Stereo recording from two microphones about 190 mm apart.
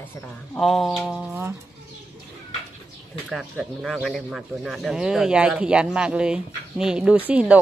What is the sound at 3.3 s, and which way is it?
Speech, centre (ahead or behind).